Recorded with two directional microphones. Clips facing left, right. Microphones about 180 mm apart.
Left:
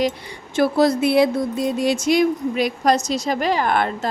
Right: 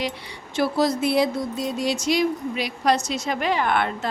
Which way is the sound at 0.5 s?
55° left (ahead or behind).